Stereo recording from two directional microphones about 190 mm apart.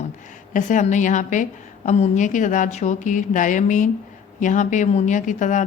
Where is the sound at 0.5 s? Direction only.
40° left (ahead or behind).